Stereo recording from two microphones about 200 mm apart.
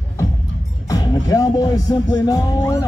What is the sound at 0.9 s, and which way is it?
Music, 15° left (ahead or behind).